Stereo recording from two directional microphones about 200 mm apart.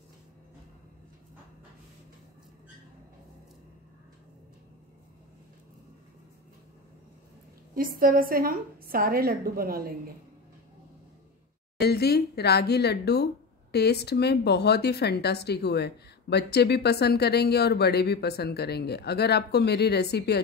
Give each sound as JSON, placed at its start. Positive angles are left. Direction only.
{"t": 7.7, "sound": "a woman's voice", "side_deg": -45}
{"t": 11.8, "sound": "speech", "side_deg": 55}